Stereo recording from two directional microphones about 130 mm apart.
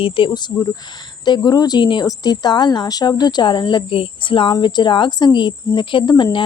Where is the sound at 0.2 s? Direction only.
40° left (ahead or behind).